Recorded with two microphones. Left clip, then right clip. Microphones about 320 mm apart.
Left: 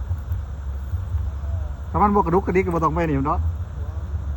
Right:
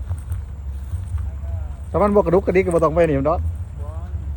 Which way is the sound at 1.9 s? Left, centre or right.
Centre.